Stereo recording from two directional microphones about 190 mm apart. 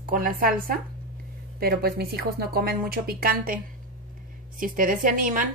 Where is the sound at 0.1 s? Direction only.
50° right (ahead or behind).